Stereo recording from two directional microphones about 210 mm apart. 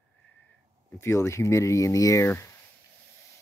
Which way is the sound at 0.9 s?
10° left (ahead or behind).